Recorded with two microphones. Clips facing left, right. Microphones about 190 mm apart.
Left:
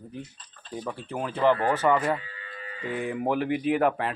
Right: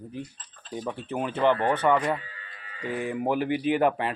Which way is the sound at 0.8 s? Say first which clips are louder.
Right 2 dB; 5° right (ahead or behind).